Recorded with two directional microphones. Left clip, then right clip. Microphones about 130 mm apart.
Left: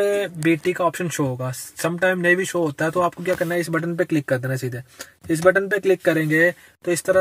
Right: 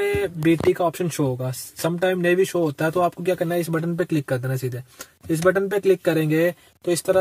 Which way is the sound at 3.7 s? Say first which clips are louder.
Left 2 dB; 15° left (ahead or behind).